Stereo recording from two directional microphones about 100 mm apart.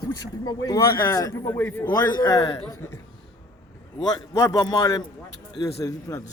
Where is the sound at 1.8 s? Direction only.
45° left (ahead or behind).